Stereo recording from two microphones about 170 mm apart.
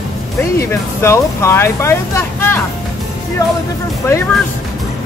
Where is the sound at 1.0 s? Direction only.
15° left (ahead or behind).